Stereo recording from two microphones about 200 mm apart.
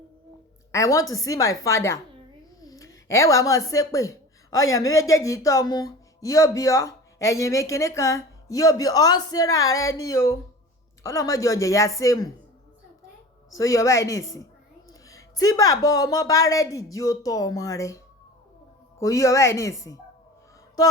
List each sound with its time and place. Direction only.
0.7 s a woman's voice: 15° left (ahead or behind)
2.6 s a sound: 15° left (ahead or behind)
4.7 s speech: 15° left (ahead or behind)
13.5 s speech: 15° left (ahead or behind)